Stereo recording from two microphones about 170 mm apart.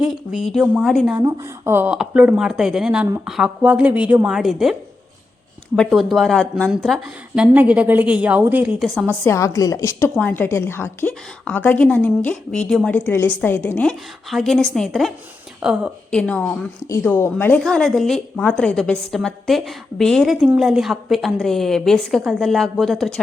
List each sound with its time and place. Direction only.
0.0 s a woman's voice: 5° right (ahead or behind)
1.1 s a woman's voice: 20° right (ahead or behind)
9.2 s a woman's voice: 15° left (ahead or behind); by 15.8 s 5° right (ahead or behind)
16.1 s a woman's voice: 10° left (ahead or behind)